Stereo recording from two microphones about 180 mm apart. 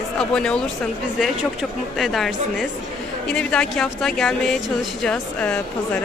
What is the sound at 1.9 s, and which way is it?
Speech, centre (ahead or behind).